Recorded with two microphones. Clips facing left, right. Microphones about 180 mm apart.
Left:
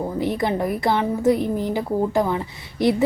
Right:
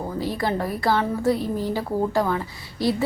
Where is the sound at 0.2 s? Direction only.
20° left (ahead or behind).